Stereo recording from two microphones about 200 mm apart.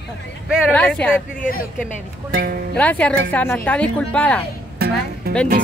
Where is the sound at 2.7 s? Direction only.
5° left (ahead or behind).